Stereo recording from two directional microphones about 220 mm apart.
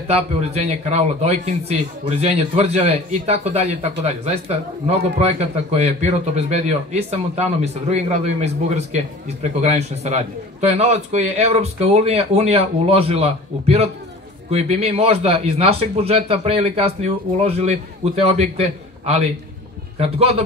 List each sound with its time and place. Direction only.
0.1 s speech: 30° right (ahead or behind)